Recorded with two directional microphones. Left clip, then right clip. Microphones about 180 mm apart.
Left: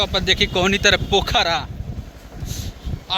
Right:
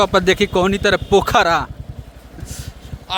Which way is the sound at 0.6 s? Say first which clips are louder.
Even; 30° right (ahead or behind).